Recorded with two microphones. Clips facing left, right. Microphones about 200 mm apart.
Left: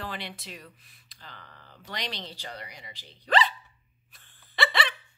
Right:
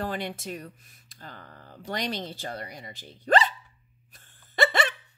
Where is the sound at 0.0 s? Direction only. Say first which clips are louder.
Right 6 dB; 45° right (ahead or behind).